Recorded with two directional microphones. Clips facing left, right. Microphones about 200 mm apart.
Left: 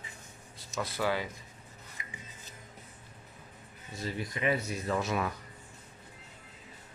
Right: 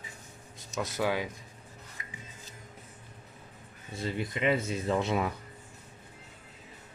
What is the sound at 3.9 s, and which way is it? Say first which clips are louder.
Speech: right 3 dB; 25° right (ahead or behind).